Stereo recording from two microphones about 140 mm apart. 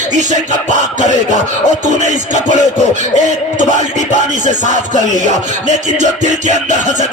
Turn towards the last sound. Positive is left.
turn(degrees=-60)  # may be behind; listen again after turning